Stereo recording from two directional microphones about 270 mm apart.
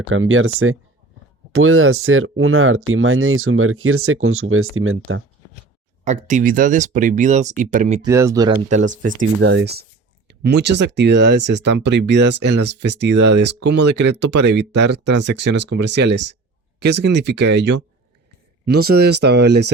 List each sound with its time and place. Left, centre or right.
0.1 s speech: right
6.1 s speech: right
8.0 s speech: centre
9.4 s speech: right
13.7 s speech: right
14.5 s speech: right